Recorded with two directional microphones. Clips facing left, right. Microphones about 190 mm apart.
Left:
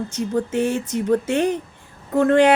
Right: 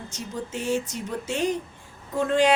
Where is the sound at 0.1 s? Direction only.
60° left (ahead or behind).